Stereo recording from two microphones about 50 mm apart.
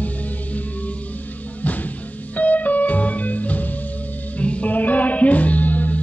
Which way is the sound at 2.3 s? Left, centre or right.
Left.